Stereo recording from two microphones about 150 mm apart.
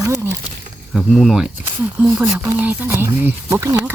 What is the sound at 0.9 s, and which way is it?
Speech, centre (ahead or behind).